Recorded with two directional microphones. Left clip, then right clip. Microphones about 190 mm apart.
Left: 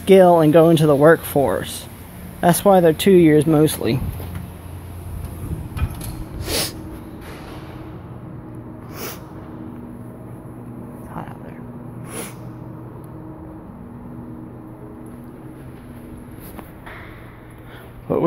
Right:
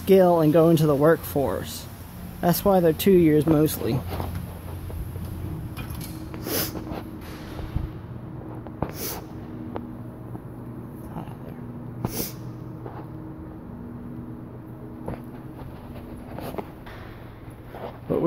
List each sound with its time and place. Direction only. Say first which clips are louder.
0.0 s speech: left 6 dB; 5° left (ahead or behind)
6.4 s snort: left 6 dB; 15° right (ahead or behind)
8.9 s snort: left 2 dB; 20° right (ahead or behind)